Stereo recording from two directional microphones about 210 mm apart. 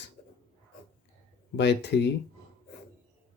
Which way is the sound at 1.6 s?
55° left (ahead or behind).